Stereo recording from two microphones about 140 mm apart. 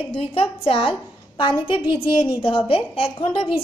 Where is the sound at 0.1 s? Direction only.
45° left (ahead or behind).